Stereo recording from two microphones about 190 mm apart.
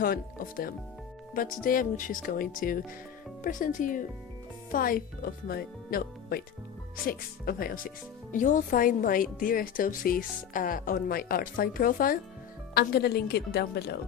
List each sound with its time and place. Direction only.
0.0 s a woman's voice: 50° left (ahead or behind)